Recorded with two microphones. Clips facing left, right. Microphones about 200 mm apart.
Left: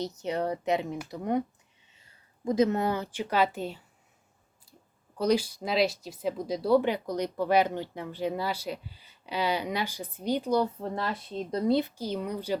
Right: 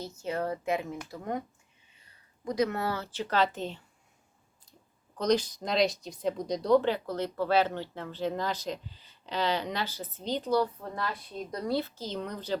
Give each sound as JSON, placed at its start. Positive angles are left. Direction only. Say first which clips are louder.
{"t": 0.2, "sound": "speech", "louder": "right 1 dB", "side_deg": 20}
{"t": 2.4, "sound": "speech", "louder": "left 4 dB", "side_deg": 25}
{"t": 5.1, "sound": "speech", "louder": "left 1 dB", "side_deg": 10}
{"t": 10.6, "sound": "speech", "louder": "left 2 dB", "side_deg": 25}